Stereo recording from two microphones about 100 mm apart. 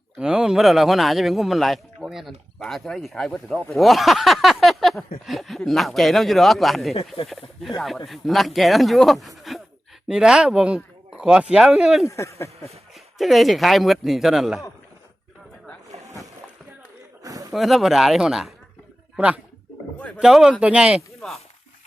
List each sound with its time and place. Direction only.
0.2 s speech: 10° right (ahead or behind)
8.0 s speech: centre (ahead or behind)
11.1 s a sound: 5° right (ahead or behind)
11.5 s speech: 5° right (ahead or behind)
12.0 s speech: 30° left (ahead or behind)
13.1 s speech: centre (ahead or behind)
17.5 s speech: centre (ahead or behind)
21.2 s speech: centre (ahead or behind)